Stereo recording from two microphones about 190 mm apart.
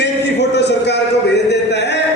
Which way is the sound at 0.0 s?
65° left (ahead or behind).